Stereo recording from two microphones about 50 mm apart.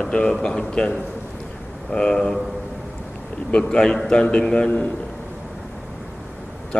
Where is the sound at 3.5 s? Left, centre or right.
Centre.